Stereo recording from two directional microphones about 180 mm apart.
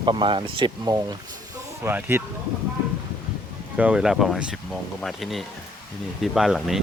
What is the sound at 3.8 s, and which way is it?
Speech, 5° right (ahead or behind).